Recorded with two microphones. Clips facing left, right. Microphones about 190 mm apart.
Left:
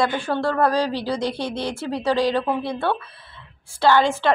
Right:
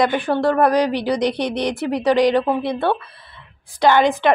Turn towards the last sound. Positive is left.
turn(degrees=-15)  # may be behind; listen again after turning